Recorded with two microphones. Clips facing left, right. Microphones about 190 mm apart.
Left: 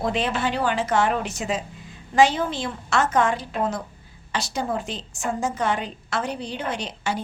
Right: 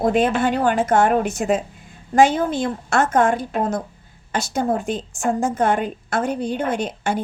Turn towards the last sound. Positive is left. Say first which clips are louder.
# right 5 dB
turn(degrees=-50)  # may be behind; listen again after turning